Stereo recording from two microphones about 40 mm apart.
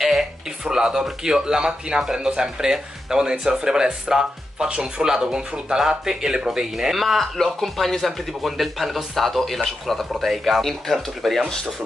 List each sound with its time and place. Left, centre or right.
0.0 s speech: centre
7.0 s speech: centre